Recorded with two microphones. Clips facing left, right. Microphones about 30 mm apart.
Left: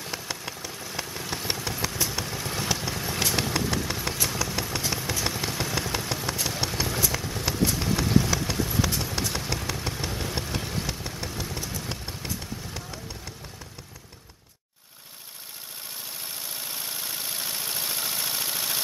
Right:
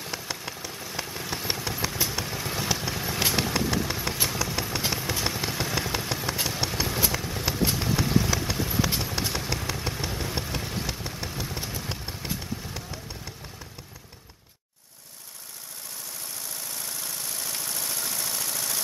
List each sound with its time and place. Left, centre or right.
0.0 s engine: centre
4.3 s vehicle: centre
5.2 s a sound: centre
6.4 s engine: centre
7.1 s vehicle: centre
16.3 s vehicle: left